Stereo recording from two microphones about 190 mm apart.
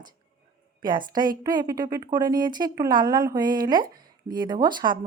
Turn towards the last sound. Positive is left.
turn(degrees=-25)  # may be behind; listen again after turning